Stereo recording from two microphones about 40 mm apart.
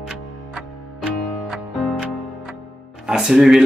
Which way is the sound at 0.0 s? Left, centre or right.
Centre.